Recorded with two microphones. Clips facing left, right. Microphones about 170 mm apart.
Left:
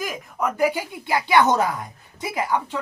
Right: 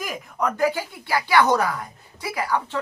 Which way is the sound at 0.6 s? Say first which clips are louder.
Left 3 dB; 15° left (ahead or behind).